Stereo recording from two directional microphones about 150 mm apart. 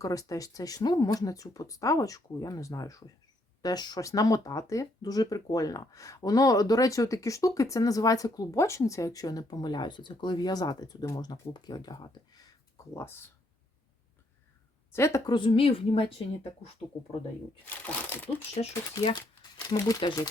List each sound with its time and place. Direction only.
0.0 s speech: 20° left (ahead or behind)
14.9 s speech: 15° left (ahead or behind)
15.3 s a woman's voice: 35° left (ahead or behind)
17.7 s speech: 15° left (ahead or behind)
18.6 s speech: 45° left (ahead or behind)
19.1 s speech: 25° left (ahead or behind)